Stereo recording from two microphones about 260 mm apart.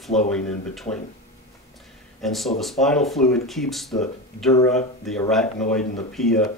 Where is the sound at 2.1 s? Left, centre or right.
Centre.